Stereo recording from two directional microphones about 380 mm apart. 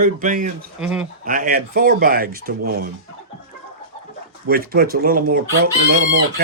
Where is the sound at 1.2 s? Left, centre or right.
Right.